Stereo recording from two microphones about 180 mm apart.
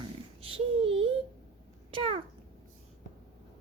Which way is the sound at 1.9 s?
30° right (ahead or behind).